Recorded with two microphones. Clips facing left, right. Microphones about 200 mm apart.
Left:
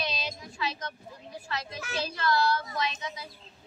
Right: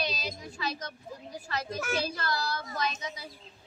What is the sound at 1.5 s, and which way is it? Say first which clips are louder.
A child's voice: right 4 dB; 40° right (ahead or behind).